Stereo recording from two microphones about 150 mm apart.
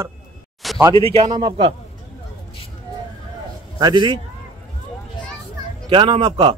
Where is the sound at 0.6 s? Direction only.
Centre (ahead or behind).